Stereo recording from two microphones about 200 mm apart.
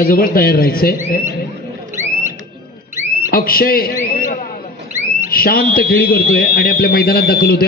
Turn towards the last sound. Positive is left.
turn(degrees=50)  # may be behind; listen again after turning